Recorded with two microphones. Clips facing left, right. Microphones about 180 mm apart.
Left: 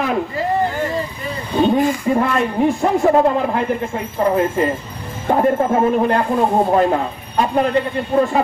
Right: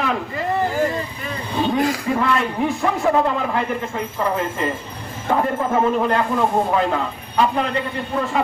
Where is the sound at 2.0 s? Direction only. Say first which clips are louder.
Left 3 dB; 45° left (ahead or behind).